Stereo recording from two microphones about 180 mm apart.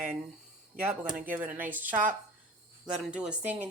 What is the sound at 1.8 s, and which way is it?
Speech, 45° right (ahead or behind).